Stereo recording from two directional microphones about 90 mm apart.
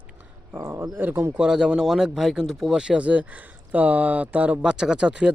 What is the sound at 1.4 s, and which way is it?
Speech, 10° right (ahead or behind).